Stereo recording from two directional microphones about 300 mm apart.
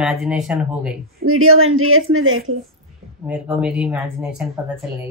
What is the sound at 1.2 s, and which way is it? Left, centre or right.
Speech, right.